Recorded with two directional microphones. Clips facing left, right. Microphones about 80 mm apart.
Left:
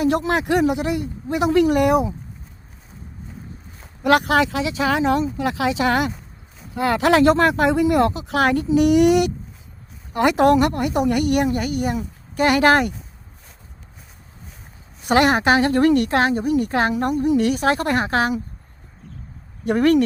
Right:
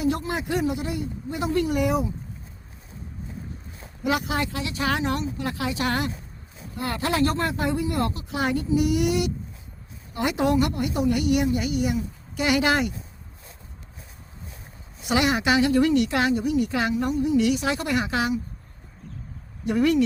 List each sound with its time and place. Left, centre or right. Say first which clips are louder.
0.0 s speech: left 6 dB; left
4.0 s a woman's voice: left 9 dB; left
15.0 s a woman's voice: left 6 dB; left
19.6 s a woman's voice: left 5 dB; left